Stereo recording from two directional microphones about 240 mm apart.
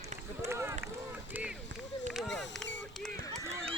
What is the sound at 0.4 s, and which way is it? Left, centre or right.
Run, centre.